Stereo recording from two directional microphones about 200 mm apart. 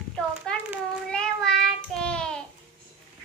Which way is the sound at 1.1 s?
5° left (ahead or behind).